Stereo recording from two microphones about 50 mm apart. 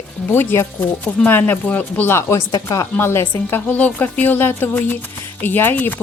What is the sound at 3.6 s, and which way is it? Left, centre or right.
Speech, left.